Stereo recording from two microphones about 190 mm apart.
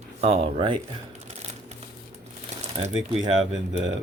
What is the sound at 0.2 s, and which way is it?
Speech, 30° right (ahead or behind).